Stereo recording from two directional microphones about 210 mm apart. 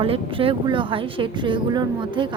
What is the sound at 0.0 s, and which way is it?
A woman's voice, 25° right (ahead or behind).